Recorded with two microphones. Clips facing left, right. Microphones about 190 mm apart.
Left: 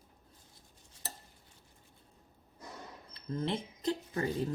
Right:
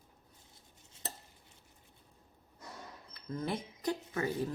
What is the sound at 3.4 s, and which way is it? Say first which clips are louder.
Speech: left 2 dB; 25° left (ahead or behind).